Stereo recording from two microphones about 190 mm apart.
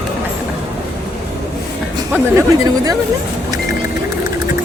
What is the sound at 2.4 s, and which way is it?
Speech, 20° right (ahead or behind).